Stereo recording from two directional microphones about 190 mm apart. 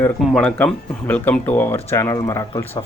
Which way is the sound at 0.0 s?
10° left (ahead or behind).